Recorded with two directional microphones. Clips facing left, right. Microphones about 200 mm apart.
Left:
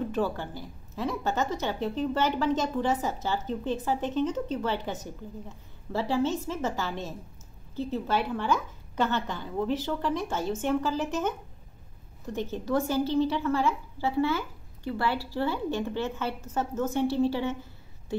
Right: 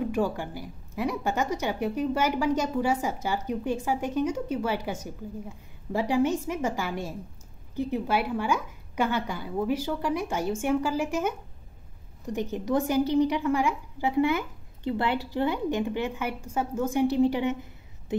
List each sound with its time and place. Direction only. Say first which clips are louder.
0.0 s a woman's voice: right 2 dB; 15° right (ahead or behind)